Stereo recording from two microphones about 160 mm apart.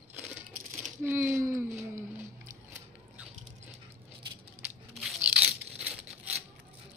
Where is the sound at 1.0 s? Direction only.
15° right (ahead or behind).